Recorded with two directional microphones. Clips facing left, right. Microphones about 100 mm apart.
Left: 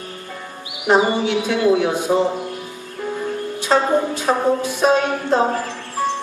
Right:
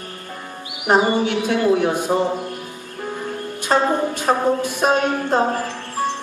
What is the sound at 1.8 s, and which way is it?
Music, 50° right (ahead or behind).